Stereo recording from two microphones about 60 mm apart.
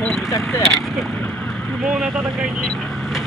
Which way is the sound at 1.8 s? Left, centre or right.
Centre.